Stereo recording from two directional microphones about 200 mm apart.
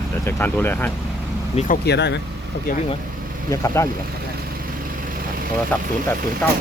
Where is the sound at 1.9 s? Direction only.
60° left (ahead or behind).